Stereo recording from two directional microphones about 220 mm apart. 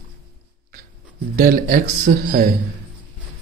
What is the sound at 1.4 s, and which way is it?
A man's voice, 40° right (ahead or behind).